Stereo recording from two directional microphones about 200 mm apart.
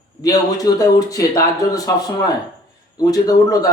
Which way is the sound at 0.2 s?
15° left (ahead or behind).